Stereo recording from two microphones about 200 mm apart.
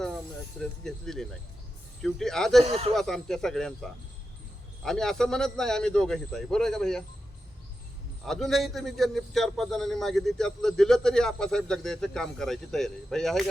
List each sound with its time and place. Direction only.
0.9 s a man's voice: centre (ahead or behind)
2.6 s speech: 30° right (ahead or behind)
2.9 s a man's voice: centre (ahead or behind)
8.2 s a man's voice: centre (ahead or behind)